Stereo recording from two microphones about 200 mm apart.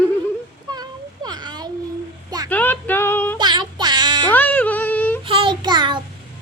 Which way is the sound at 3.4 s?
20° right (ahead or behind).